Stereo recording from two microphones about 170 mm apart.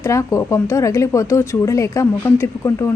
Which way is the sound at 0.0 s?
20° left (ahead or behind).